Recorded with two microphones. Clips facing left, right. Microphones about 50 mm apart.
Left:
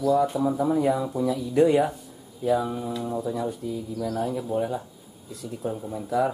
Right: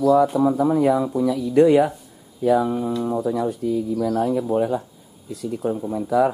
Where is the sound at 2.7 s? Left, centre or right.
Centre.